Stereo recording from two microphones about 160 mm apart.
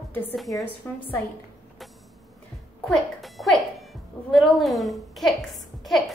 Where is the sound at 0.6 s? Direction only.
10° left (ahead or behind).